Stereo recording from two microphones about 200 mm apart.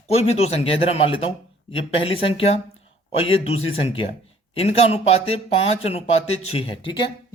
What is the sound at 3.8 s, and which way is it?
Speech, 25° left (ahead or behind).